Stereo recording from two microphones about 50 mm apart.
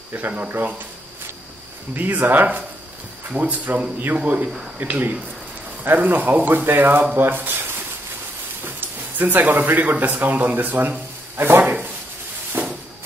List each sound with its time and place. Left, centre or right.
0.1 s speech: right
2.0 s speech: right
8.6 s speech: right
12.6 s a sound: right